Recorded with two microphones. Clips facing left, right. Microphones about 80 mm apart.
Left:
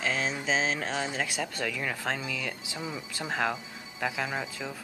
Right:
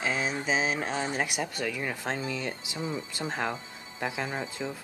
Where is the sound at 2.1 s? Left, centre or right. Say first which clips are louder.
Right 2 dB; right.